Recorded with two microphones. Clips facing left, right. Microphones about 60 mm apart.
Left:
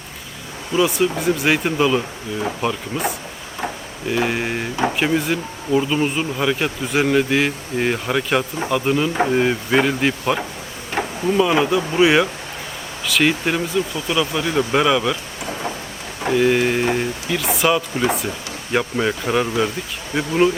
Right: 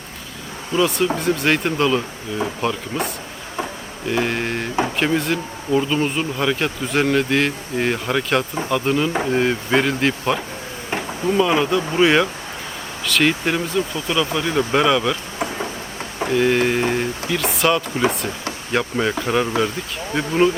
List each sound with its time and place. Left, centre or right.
0.7 s speech: centre
4.1 s speech: centre
10.9 s insect: right
11.3 s speech: centre
16.3 s speech: centre